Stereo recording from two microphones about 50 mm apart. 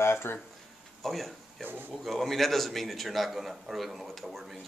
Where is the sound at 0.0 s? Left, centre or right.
Left.